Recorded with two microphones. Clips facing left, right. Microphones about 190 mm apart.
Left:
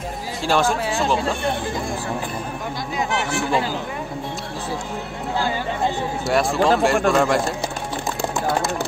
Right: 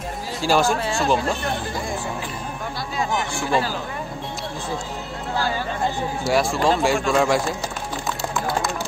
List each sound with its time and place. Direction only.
0.4 s speech: centre (ahead or behind)
3.2 s speech: 70° left (ahead or behind)
6.2 s speech: centre (ahead or behind)